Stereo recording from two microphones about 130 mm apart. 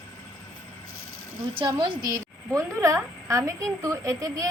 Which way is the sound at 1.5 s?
35° right (ahead or behind).